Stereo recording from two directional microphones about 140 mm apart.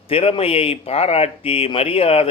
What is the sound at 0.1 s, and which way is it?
Speech, 40° left (ahead or behind).